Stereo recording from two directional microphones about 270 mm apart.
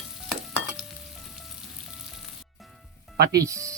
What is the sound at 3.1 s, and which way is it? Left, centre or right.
Speech, right.